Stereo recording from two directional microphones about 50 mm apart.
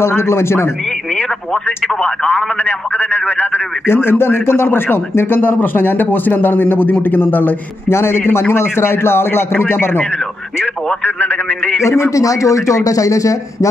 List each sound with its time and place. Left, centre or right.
0.0 s speech: left
2.0 s a man's voice: left
3.8 s a man's voice: left
7.9 s a man's voice: left
11.1 s a man's voice: left
11.8 s speech: left